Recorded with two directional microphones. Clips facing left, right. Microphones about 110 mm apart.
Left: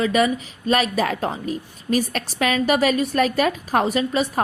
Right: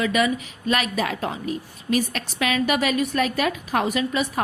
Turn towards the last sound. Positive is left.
turn(degrees=35)  # may be behind; listen again after turning